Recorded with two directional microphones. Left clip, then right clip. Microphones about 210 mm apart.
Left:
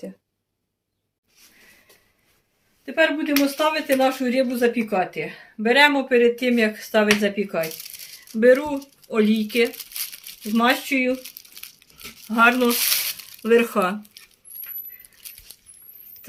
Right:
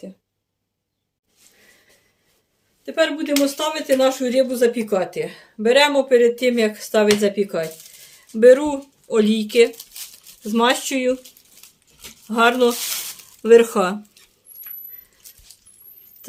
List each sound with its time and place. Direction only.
2.8 s speech: 50° right (ahead or behind)
12.3 s speech: 45° right (ahead or behind)